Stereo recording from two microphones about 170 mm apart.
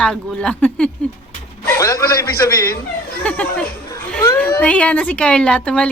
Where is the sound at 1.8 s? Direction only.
20° left (ahead or behind).